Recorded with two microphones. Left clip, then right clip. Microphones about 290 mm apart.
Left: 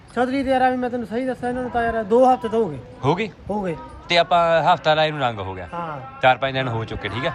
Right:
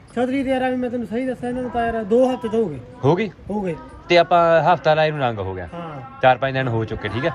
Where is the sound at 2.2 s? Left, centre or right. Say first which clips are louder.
Left 6 dB; left.